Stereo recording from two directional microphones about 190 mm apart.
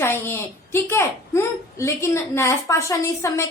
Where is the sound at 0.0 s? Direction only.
10° left (ahead or behind).